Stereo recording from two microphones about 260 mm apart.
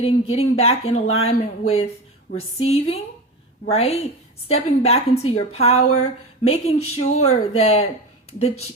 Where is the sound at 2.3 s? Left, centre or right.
Left.